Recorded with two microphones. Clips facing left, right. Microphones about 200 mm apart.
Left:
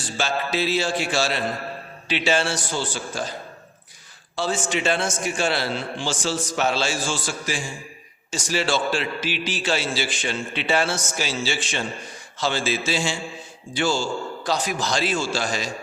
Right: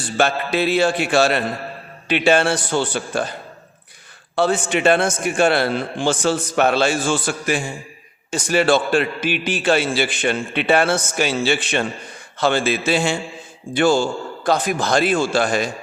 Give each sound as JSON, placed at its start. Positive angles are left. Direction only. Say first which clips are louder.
{"t": 0.0, "sound": "a man's voice", "louder": "right 6 dB", "side_deg": -60}
{"t": 4.4, "sound": "a man's voice", "louder": "right 6 dB", "side_deg": -60}